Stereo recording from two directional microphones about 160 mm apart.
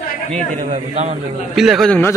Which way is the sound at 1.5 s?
Centre (ahead or behind).